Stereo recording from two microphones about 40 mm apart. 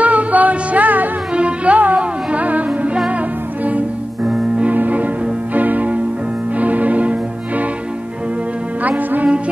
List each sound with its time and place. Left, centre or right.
0.0 s music: right
1.3 s music: right
8.8 s music: right